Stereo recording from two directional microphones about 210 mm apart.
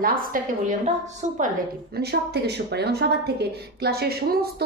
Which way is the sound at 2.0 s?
50° right (ahead or behind).